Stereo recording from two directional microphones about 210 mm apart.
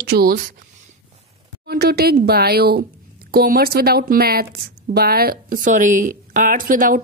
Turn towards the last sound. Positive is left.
turn(degrees=-40)  # may be behind; listen again after turning